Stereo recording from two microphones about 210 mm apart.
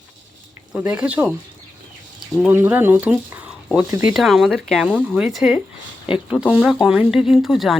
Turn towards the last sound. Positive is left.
turn(degrees=0)  # may be behind; listen again after turning